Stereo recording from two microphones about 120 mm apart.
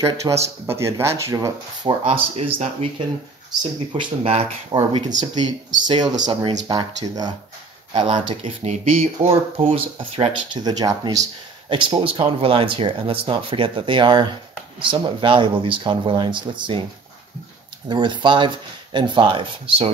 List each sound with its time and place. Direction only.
0.0 s speech: 25° right (ahead or behind)
1.8 s speech: 40° right (ahead or behind)
2.3 s speech: 55° right (ahead or behind)
3.9 s speech: 50° right (ahead or behind); by 7.3 s 30° right (ahead or behind)
7.9 s speech: 45° right (ahead or behind); by 9.3 s 60° right (ahead or behind)
9.9 s speech: 50° right (ahead or behind)
10.6 s speech: 35° right (ahead or behind)
11.7 s speech: 45° right (ahead or behind)
17.8 s speech: 40° right (ahead or behind)